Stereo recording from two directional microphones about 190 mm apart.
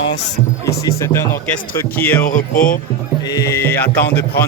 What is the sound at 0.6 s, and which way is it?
Speech, 15° left (ahead or behind).